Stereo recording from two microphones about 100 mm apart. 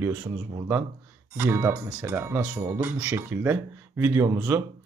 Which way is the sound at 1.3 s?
25° right (ahead or behind).